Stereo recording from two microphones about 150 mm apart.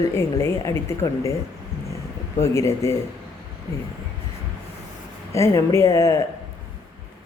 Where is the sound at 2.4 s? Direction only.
20° left (ahead or behind).